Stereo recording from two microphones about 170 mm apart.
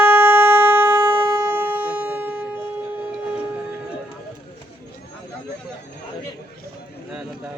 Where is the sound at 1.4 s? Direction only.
15° right (ahead or behind).